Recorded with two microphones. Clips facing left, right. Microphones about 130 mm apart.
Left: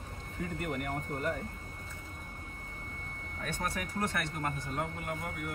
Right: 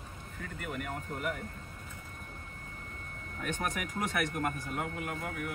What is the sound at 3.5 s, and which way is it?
Speech, 15° right (ahead or behind).